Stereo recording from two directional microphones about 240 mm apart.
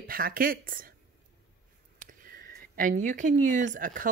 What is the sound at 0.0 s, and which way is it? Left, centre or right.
Speech, right.